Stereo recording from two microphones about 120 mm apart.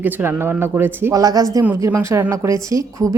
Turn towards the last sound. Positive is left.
turn(degrees=-25)  # may be behind; listen again after turning